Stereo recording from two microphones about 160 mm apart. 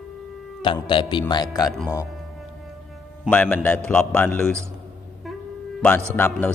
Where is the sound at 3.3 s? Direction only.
10° left (ahead or behind).